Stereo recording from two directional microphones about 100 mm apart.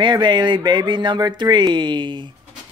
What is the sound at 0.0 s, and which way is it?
Speech, 50° right (ahead or behind).